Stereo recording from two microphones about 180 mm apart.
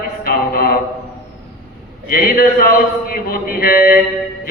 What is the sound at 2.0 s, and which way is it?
A man's voice, 55° left (ahead or behind).